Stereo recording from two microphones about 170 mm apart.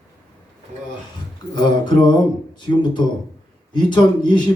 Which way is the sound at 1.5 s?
25° left (ahead or behind).